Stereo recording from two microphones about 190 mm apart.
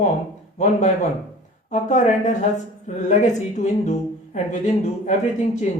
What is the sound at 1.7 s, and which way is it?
A woman's voice, 40° left (ahead or behind).